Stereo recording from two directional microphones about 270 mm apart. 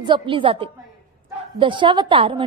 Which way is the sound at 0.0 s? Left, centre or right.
Centre.